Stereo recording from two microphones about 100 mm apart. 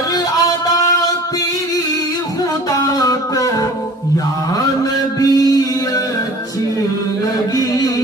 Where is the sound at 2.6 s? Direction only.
35° left (ahead or behind).